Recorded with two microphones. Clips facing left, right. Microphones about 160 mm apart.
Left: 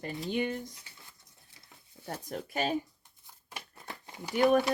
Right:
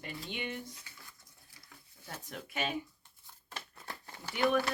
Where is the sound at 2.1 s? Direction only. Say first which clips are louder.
Left 6 dB; 40° left (ahead or behind).